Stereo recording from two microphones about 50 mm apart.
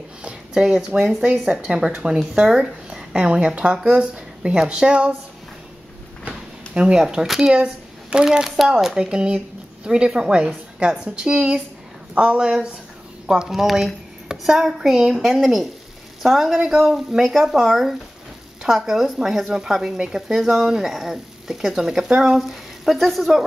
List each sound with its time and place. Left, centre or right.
0.2 s speech: centre
1.7 s a woman's voice: centre
6.2 s a sound: centre
7.5 s a woman's voice: centre